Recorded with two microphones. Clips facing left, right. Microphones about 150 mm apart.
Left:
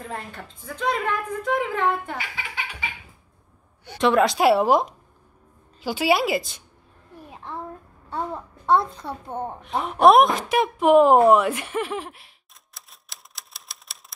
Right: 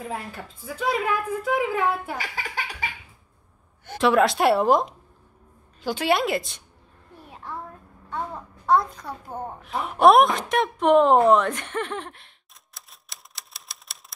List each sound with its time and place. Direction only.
0.0 s a woman's voice: 5° right (ahead or behind)
2.1 s laughter: 40° right (ahead or behind)
4.0 s speech: centre (ahead or behind)
7.2 s a sound: 20° left (ahead or behind)
8.1 s babbling: 30° left (ahead or behind)
8.6 s a child's voice: 25° left (ahead or behind)
10.0 s speech: centre (ahead or behind)
12.7 s typewriter: centre (ahead or behind)